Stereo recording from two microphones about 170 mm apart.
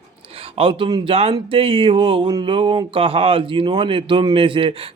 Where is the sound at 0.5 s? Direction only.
30° right (ahead or behind).